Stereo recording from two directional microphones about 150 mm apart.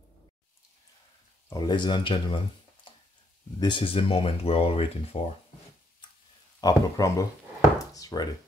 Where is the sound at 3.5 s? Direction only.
30° left (ahead or behind).